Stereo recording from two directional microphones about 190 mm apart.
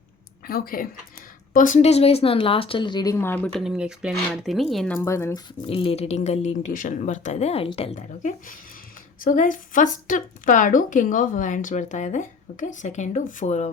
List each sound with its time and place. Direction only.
0.4 s speech: 50° left (ahead or behind); by 3.6 s 10° left (ahead or behind)
3.6 s speech: 5° right (ahead or behind)
4.9 s speech: 15° left (ahead or behind)
5.6 s speech: 30° left (ahead or behind)